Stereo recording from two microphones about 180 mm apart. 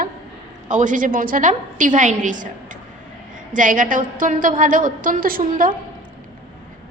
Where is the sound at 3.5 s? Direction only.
45° right (ahead or behind).